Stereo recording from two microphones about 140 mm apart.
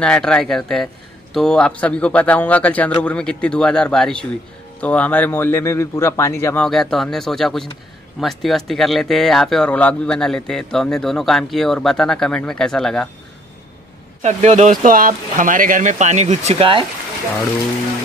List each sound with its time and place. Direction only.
0.0 s a man's voice: 5° left (ahead or behind)
6.6 s speech: 5° left (ahead or behind)
14.2 s speech: 55° right (ahead or behind)